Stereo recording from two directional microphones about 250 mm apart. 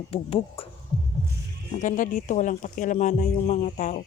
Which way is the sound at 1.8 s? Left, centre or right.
Left.